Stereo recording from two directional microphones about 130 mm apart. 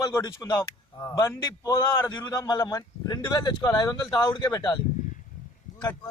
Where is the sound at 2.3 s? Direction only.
25° left (ahead or behind).